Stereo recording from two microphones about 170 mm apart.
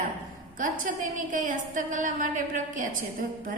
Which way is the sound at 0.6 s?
55° right (ahead or behind).